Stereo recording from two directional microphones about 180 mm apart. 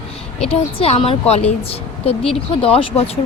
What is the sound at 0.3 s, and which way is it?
Speech, 35° left (ahead or behind).